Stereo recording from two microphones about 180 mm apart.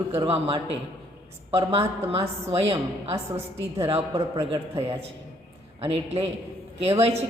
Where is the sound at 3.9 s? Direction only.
30° right (ahead or behind).